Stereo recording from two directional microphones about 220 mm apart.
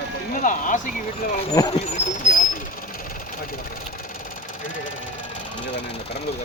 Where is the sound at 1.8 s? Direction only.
30° left (ahead or behind).